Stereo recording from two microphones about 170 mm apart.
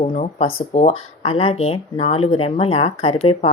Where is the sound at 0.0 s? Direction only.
45° left (ahead or behind).